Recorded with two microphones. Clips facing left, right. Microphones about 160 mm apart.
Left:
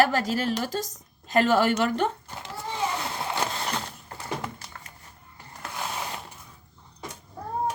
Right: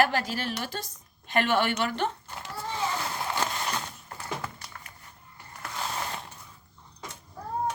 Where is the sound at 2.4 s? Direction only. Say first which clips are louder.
Left 2 dB; 20° left (ahead or behind).